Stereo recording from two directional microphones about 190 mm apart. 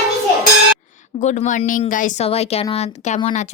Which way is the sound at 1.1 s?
40° left (ahead or behind).